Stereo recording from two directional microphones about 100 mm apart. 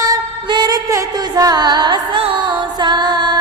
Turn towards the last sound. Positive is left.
turn(degrees=-50)  # may be behind; listen again after turning